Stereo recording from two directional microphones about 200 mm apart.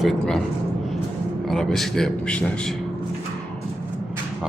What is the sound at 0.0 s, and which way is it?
Speech, centre (ahead or behind).